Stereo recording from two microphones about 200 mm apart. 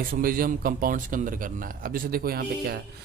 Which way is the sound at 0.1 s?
45° right (ahead or behind).